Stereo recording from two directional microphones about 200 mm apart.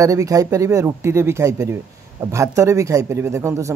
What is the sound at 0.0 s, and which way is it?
Speech, 15° right (ahead or behind).